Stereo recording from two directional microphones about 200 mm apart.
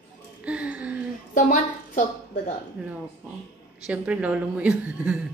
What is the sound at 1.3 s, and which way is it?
A woman's voice, 40° left (ahead or behind).